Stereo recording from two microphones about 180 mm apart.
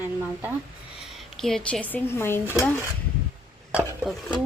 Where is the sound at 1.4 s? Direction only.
Centre (ahead or behind).